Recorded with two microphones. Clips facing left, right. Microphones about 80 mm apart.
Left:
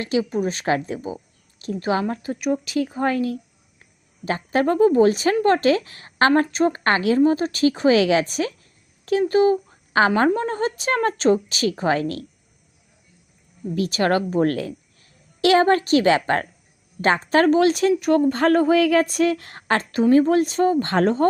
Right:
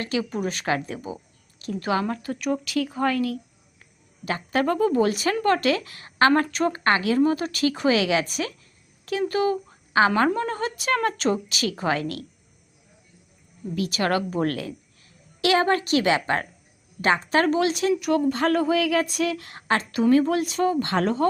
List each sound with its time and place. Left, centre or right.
0.0 s a woman's voice: left
4.3 s a woman's voice: left
13.7 s speech: left